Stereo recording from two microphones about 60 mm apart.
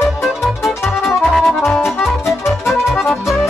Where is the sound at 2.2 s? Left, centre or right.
Left.